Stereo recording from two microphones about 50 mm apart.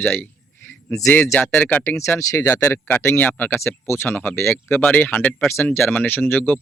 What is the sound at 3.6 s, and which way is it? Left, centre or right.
Speech, left.